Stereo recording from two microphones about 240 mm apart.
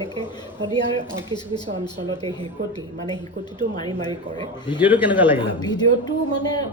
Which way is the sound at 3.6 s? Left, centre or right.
Centre.